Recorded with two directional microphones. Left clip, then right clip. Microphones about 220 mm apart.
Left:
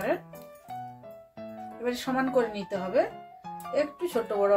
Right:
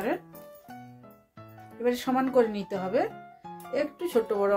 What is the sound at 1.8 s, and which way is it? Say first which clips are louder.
Speech: right 3 dB; 40° right (ahead or behind).